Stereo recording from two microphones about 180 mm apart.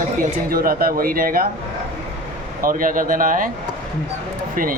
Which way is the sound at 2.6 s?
50° right (ahead or behind).